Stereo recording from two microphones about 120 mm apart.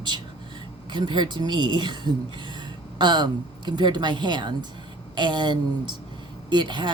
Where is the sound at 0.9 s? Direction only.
40° right (ahead or behind).